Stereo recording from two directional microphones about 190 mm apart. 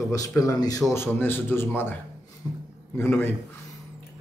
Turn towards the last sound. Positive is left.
turn(degrees=10)  # may be behind; listen again after turning